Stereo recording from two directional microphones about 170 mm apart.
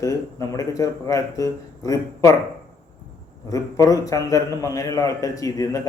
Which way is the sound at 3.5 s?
20° left (ahead or behind).